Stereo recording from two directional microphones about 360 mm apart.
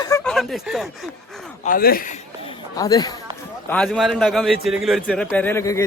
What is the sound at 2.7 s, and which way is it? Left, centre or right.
A man's voice, centre.